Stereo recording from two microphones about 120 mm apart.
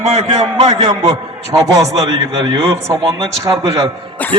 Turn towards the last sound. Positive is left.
turn(degrees=15)  # may be behind; listen again after turning